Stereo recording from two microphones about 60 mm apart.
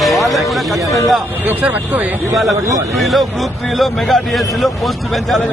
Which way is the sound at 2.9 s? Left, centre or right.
Centre.